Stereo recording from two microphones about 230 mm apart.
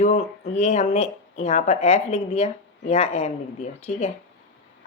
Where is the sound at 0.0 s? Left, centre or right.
Left.